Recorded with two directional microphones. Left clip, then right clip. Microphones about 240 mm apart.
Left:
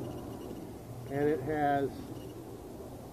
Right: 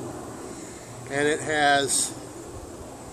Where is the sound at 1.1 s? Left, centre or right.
Right.